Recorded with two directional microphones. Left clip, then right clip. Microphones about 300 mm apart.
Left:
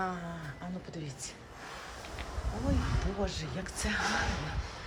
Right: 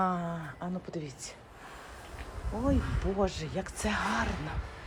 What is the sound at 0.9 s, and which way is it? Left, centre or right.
Speech, centre.